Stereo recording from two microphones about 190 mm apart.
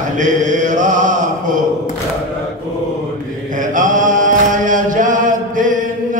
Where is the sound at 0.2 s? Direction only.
40° right (ahead or behind).